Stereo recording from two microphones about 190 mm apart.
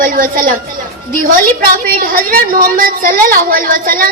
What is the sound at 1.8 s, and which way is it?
A woman's voice, 50° right (ahead or behind).